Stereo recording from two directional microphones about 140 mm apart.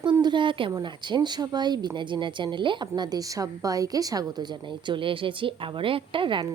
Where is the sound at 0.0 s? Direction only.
30° right (ahead or behind).